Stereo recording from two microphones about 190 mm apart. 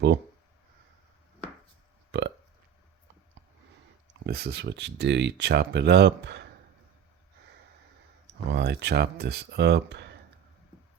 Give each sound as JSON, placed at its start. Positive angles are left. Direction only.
{"t": 2.1, "sound": "burping", "side_deg": -65}
{"t": 4.3, "sound": "speech", "side_deg": -60}
{"t": 8.4, "sound": "speech", "side_deg": -60}